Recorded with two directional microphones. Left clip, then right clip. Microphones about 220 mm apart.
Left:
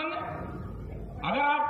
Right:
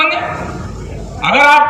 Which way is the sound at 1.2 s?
45° right (ahead or behind).